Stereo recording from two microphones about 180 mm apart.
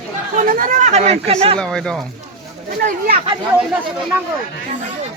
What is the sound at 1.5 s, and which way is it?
Speech, 5° left (ahead or behind).